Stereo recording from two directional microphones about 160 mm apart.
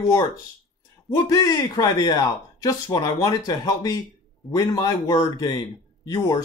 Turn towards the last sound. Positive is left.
turn(degrees=25)  # may be behind; listen again after turning